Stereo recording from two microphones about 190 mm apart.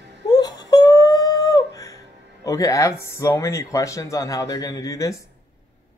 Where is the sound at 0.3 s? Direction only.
20° left (ahead or behind).